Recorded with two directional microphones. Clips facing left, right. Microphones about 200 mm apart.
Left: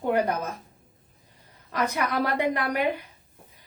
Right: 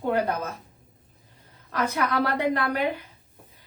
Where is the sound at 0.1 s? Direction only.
15° left (ahead or behind).